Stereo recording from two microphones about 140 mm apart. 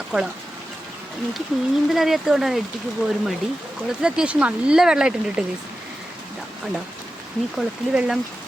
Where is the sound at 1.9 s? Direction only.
Centre (ahead or behind).